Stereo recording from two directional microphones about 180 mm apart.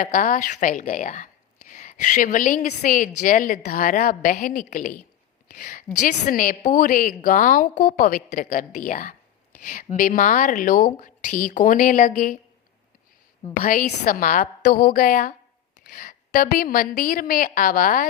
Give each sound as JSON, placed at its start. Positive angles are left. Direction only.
{"t": 0.0, "sound": "a woman's voice", "side_deg": 50}
{"t": 13.6, "sound": "a woman's voice", "side_deg": 50}